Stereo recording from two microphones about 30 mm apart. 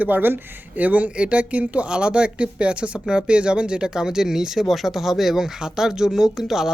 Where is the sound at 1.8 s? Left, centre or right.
Right.